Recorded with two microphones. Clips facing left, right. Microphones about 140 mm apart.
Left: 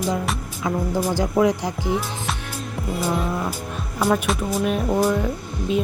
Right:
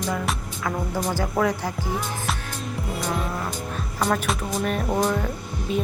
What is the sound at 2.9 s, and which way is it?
Music, 5° left (ahead or behind).